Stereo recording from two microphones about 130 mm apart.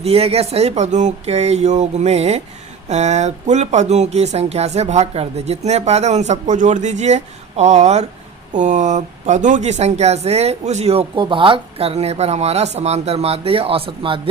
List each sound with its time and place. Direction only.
0.0 s speech: 50° right (ahead or behind)
11.1 s speech: 40° right (ahead or behind)